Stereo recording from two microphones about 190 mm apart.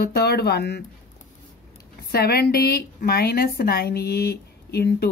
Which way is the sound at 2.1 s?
55° left (ahead or behind).